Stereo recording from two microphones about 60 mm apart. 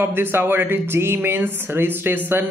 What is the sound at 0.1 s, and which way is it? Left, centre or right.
Speech, right.